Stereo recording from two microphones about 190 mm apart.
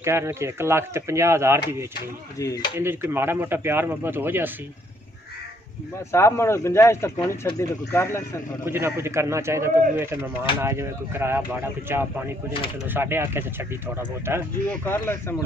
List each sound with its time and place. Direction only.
0.0 s speech: 15° right (ahead or behind)
2.3 s speech: 20° left (ahead or behind)
2.8 s speech: 10° right (ahead or behind)
6.1 s speech: 15° left (ahead or behind)
8.6 s speech: 15° right (ahead or behind)
14.7 s speech: 10° left (ahead or behind)